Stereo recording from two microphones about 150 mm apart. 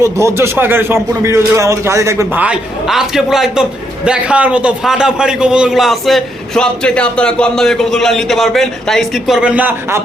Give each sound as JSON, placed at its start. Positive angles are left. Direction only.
{"t": 0.0, "sound": "a man's voice", "side_deg": -20}